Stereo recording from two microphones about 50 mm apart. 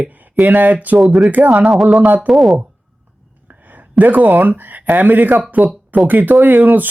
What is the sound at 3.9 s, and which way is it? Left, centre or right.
Speech, right.